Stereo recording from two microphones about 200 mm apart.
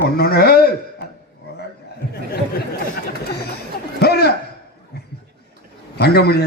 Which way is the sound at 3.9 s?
55° left (ahead or behind).